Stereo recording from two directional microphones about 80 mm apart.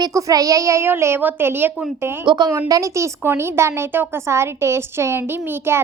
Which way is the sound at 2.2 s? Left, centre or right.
Right.